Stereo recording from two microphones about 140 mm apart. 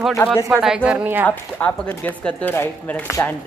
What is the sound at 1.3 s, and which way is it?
Speech, 10° left (ahead or behind).